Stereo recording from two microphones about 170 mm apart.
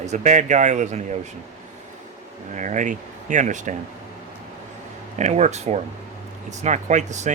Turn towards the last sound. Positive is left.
turn(degrees=-45)  # may be behind; listen again after turning